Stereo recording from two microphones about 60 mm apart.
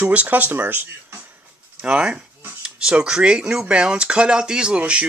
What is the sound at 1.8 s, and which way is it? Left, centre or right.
Speech, centre.